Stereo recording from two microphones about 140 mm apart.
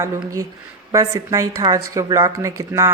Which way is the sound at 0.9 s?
20° right (ahead or behind).